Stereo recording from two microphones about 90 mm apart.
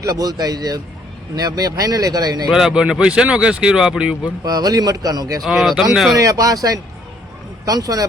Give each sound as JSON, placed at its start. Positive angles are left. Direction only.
{"t": 0.0, "sound": "speech", "side_deg": -45}
{"t": 2.5, "sound": "speech", "side_deg": -5}
{"t": 4.4, "sound": "speech", "side_deg": -45}
{"t": 5.5, "sound": "speech", "side_deg": -5}
{"t": 6.1, "sound": "speech", "side_deg": -40}